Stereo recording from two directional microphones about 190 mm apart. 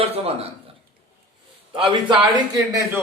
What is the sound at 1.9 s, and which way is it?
Speech, 25° right (ahead or behind).